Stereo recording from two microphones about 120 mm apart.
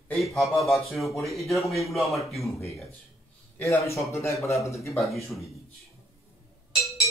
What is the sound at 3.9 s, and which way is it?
Speech, 25° left (ahead or behind).